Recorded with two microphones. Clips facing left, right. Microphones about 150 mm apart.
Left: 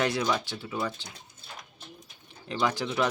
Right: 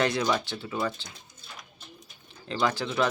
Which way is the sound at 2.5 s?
10° left (ahead or behind).